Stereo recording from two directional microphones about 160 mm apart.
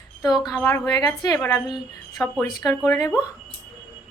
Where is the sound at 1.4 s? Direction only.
15° left (ahead or behind).